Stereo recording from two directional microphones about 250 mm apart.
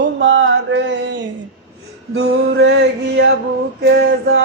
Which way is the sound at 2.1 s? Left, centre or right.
Right.